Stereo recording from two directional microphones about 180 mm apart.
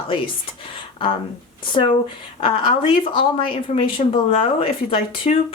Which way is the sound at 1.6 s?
30° left (ahead or behind).